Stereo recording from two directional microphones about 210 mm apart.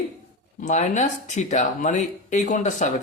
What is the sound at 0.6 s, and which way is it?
Speech, 35° left (ahead or behind).